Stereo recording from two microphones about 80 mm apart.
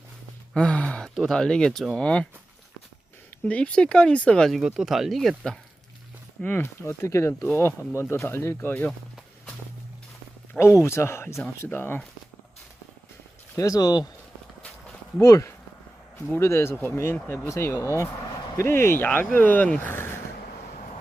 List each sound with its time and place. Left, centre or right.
0.5 s a sound: centre
1.3 s speech: centre
3.4 s speech: centre
4.5 s speech: centre
6.4 s speech: left
10.6 s speech: left
11.6 s speech: left
13.6 s speech: left
15.2 s speech: left; by 19.9 s centre